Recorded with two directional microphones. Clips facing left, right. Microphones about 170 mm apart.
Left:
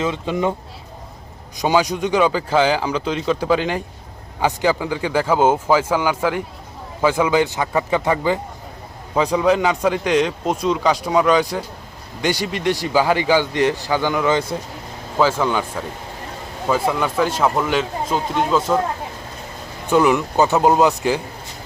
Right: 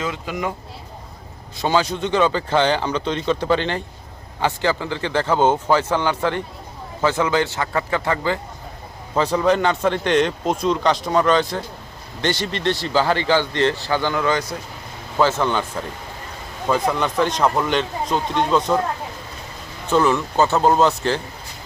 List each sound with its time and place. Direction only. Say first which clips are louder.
0.0 s speech: left 5 dB; 25° left (ahead or behind)
1.5 s speech: left 2 dB; 15° left (ahead or behind)
19.9 s speech: left 2 dB; 15° left (ahead or behind)